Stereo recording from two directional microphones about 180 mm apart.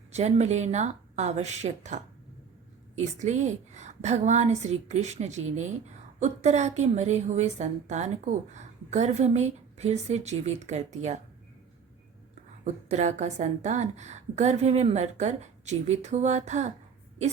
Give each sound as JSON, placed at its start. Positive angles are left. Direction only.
{"t": 0.1, "sound": "a woman's voice", "side_deg": -40}
{"t": 12.6, "sound": "a woman's voice", "side_deg": -40}